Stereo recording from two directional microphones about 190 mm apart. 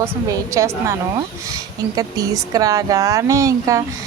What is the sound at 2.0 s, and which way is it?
A woman's voice, 20° right (ahead or behind).